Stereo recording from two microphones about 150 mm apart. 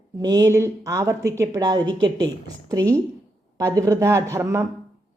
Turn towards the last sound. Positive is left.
turn(degrees=-20)  # may be behind; listen again after turning